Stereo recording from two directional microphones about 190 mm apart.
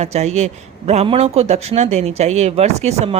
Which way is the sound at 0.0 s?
35° right (ahead or behind).